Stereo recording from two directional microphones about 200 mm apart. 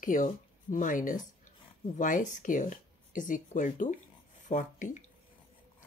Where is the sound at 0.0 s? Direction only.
40° left (ahead or behind).